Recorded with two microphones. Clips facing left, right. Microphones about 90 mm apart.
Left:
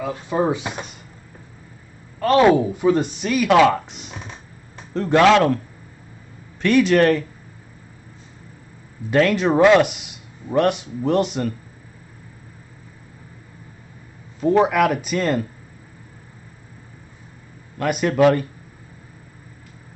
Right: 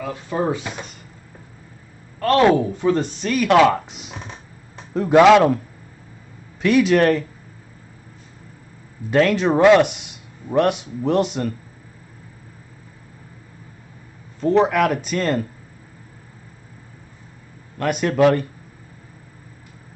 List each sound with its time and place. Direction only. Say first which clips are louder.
0.0 s speech: left 2 dB; 15° left (ahead or behind)
2.1 s a man's voice: left 1 dB; 10° left (ahead or behind); by 5.6 s 10° right (ahead or behind)
6.6 s speech: even; 5° right (ahead or behind)
9.1 s speech: even; centre (ahead or behind)
14.4 s speech: even; 5° left (ahead or behind)
17.7 s speech: even; centre (ahead or behind)